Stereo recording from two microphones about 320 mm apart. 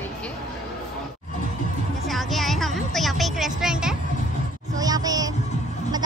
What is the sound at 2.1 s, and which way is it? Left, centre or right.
Speech, centre.